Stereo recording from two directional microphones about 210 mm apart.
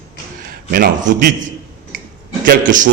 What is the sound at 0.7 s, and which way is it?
Speech, 40° right (ahead or behind).